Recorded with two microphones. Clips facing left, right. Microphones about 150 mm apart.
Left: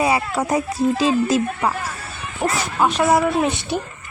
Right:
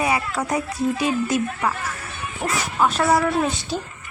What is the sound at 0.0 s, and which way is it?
Speech, 30° left (ahead or behind).